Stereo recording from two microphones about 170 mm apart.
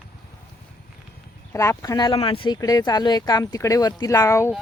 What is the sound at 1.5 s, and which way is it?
Speech, 15° left (ahead or behind).